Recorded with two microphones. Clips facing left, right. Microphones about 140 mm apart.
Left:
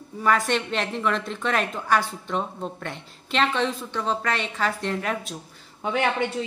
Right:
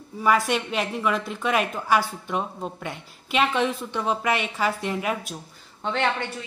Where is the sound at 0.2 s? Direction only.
5° right (ahead or behind).